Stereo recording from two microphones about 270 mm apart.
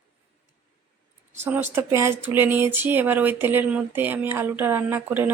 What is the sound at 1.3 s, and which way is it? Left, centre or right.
Speech, centre.